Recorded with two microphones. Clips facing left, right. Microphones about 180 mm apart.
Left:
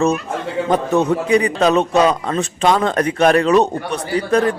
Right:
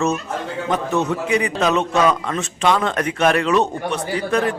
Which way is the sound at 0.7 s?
35° left (ahead or behind).